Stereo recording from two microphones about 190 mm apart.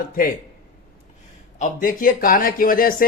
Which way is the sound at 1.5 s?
45° left (ahead or behind).